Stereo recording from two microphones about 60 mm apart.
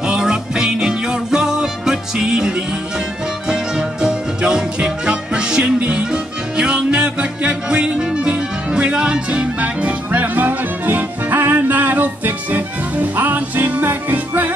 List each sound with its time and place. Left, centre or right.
0.0 s music: centre; by 14.5 s right